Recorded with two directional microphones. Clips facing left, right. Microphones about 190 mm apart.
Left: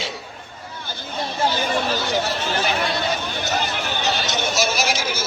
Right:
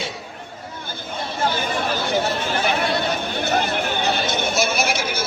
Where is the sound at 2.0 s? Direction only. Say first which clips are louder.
Right 1 dB; 55° right (ahead or behind).